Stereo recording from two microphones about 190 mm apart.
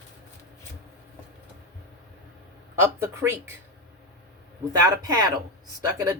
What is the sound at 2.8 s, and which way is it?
Speech, 15° right (ahead or behind).